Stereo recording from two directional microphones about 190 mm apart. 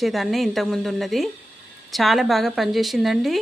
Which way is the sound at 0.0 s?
Centre (ahead or behind).